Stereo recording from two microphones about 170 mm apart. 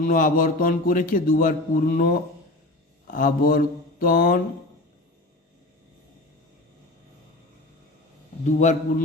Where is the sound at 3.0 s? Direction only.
55° left (ahead or behind).